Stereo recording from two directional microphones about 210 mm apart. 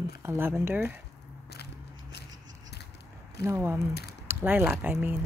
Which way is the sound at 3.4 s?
10° right (ahead or behind).